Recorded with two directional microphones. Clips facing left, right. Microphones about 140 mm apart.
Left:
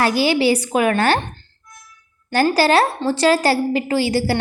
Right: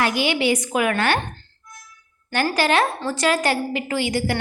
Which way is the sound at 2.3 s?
35° left (ahead or behind).